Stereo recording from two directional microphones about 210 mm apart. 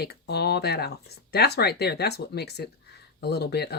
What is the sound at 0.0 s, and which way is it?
Speech, 50° left (ahead or behind).